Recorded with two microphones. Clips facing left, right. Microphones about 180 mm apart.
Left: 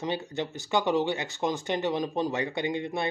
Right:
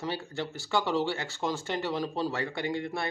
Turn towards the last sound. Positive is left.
turn(degrees=20)  # may be behind; listen again after turning